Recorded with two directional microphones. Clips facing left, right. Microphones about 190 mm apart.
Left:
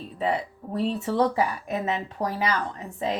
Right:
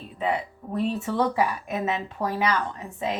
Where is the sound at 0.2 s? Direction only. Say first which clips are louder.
Even; 40° left (ahead or behind).